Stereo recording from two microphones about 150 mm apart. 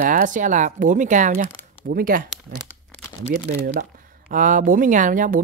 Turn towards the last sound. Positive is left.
turn(degrees=-60)  # may be behind; listen again after turning